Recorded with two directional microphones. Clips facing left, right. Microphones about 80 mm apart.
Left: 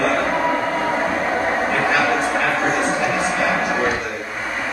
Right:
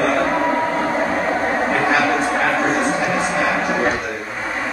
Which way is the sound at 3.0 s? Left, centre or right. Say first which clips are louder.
Right 1 dB; right.